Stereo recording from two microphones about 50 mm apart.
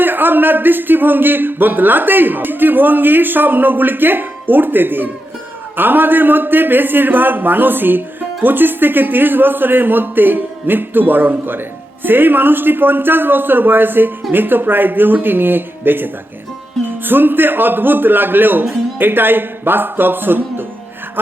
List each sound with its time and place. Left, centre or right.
0.0 s speech: right